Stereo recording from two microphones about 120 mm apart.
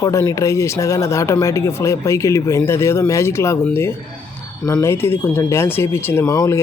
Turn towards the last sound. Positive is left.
turn(degrees=25)  # may be behind; listen again after turning